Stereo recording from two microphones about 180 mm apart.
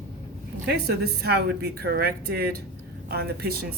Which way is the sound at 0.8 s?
65° right (ahead or behind).